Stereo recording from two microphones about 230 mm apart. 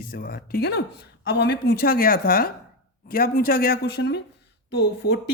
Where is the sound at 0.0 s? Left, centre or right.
Left.